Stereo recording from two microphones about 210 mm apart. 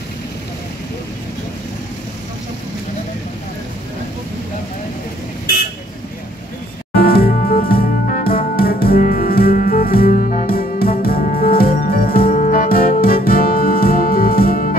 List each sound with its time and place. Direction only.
6.9 s music: 45° left (ahead or behind)